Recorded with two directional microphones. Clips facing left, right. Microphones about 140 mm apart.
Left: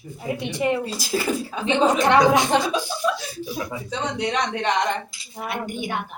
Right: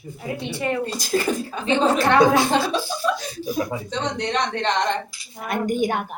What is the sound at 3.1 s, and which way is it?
Speech, 45° right (ahead or behind).